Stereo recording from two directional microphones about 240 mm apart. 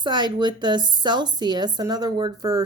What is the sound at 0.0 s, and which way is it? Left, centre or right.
A woman's voice, centre.